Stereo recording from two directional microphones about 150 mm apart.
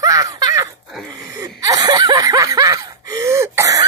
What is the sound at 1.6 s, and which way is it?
Snicker, 25° right (ahead or behind).